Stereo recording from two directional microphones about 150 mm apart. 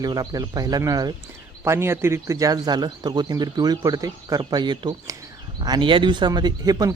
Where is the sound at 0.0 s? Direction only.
25° right (ahead or behind).